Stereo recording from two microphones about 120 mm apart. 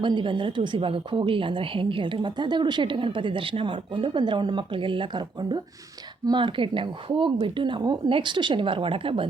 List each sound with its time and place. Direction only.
0.0 s a woman's voice: 40° right (ahead or behind)